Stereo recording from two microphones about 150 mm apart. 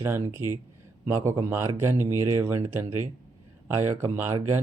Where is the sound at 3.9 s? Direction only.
15° right (ahead or behind).